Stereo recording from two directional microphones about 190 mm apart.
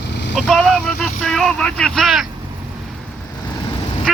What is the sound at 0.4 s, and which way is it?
Speech, centre (ahead or behind).